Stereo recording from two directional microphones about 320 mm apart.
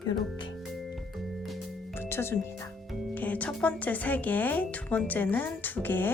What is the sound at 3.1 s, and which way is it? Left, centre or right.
Speech, centre.